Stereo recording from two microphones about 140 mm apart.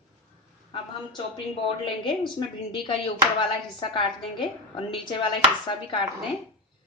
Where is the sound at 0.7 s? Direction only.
35° left (ahead or behind).